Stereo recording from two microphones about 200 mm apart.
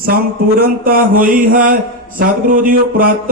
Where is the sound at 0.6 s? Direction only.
45° right (ahead or behind).